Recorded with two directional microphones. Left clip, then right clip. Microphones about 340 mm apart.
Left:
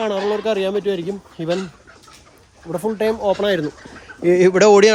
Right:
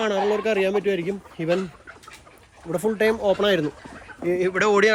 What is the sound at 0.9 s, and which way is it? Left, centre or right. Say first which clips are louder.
Speech: left 2 dB; centre.